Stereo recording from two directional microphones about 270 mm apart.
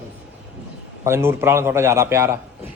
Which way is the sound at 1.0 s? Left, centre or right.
Centre.